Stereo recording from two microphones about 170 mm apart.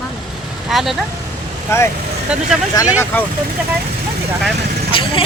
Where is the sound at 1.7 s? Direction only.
15° left (ahead or behind).